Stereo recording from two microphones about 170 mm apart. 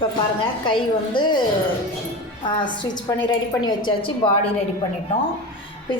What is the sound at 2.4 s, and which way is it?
A woman's voice, 25° left (ahead or behind).